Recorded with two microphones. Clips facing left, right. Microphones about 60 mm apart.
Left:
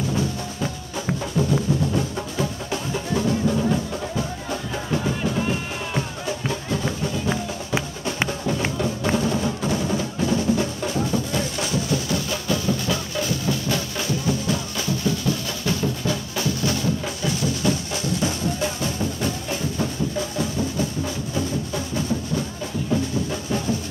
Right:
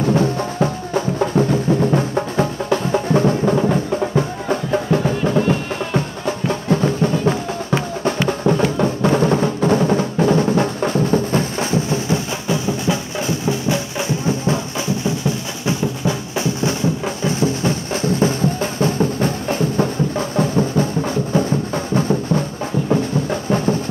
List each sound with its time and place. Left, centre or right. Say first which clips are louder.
0.0 s music: right 8 dB; right
6.2 s music: right 7 dB; right
23.5 s a sound: right 7 dB; right